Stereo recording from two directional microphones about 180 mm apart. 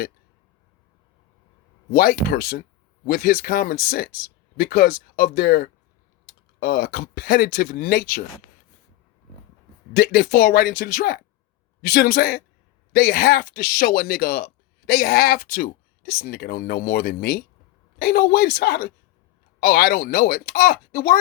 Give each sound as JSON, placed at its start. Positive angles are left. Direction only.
{"t": 1.9, "sound": "speech", "side_deg": 55}
{"t": 9.9, "sound": "speech", "side_deg": 60}